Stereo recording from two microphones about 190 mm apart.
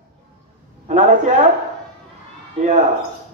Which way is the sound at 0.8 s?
40° right (ahead or behind).